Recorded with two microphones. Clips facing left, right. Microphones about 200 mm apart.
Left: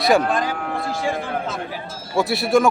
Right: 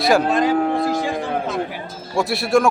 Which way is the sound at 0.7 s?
20° right (ahead or behind).